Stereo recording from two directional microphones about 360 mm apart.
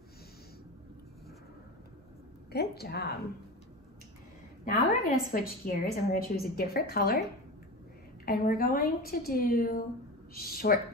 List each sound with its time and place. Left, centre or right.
2.5 s a woman's voice: left
4.6 s a woman's voice: left
8.3 s a woman's voice: left